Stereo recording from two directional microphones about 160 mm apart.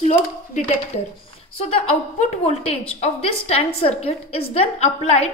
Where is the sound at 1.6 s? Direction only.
40° left (ahead or behind).